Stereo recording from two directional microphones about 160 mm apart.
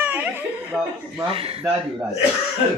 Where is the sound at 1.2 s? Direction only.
35° right (ahead or behind).